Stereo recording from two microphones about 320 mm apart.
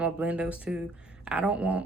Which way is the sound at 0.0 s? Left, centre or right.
Centre.